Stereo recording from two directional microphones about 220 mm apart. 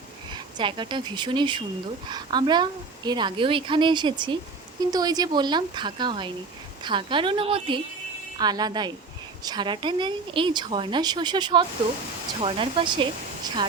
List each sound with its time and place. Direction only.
0.3 s a woman's voice: 20° right (ahead or behind)